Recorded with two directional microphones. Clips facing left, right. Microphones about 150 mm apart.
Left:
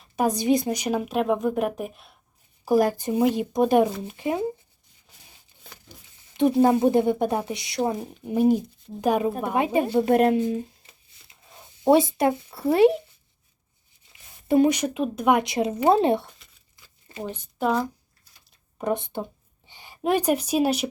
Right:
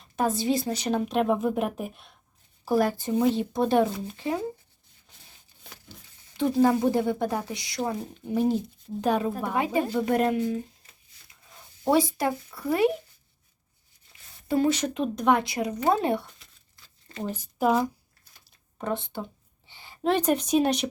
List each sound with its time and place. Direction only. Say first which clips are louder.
0.3 s a woman's voice: left 5 dB; 15° left (ahead or behind); by 2.1 s centre (ahead or behind)
2.6 s speech: left 3 dB; 15° left (ahead or behind)
6.3 s speech: left 3 dB; 20° left (ahead or behind)
10.1 s shuffling cards: left 4 dB; 25° left (ahead or behind)
11.9 s speech: left 5 dB; 25° left (ahead or behind)
14.4 s speech: left 4 dB; 20° left (ahead or behind)
16.7 s crumpling: left 1 dB; 15° left (ahead or behind)
17.6 s a woman's voice: right 1 dB; 5° right (ahead or behind)
18.8 s speech: left 4 dB; 15° left (ahead or behind)